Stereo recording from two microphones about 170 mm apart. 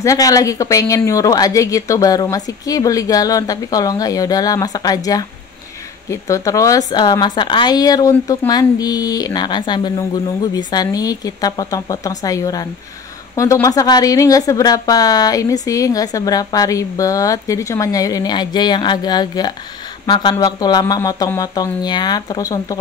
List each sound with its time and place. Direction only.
0.0 s a woman's voice: 20° left (ahead or behind)